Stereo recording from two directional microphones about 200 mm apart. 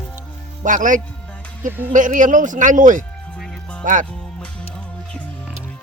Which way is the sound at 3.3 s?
5° left (ahead or behind).